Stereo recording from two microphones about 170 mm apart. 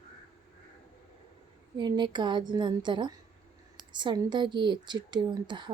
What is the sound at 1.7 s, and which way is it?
Speech, 25° right (ahead or behind).